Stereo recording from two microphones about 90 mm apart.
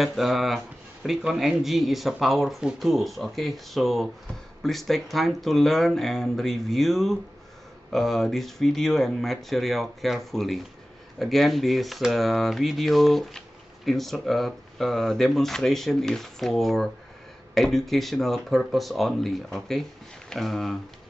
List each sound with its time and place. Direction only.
0.0 s speech: centre (ahead or behind)